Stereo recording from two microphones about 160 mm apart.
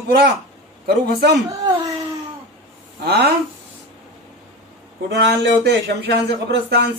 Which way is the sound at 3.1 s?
90° right.